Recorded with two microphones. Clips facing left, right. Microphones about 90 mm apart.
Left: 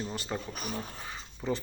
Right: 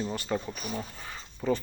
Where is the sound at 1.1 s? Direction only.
25° left (ahead or behind).